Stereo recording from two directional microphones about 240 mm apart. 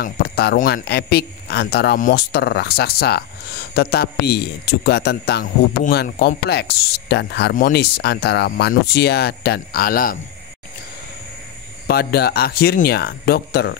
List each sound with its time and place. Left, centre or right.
0.0 s speech: left
11.9 s speech: left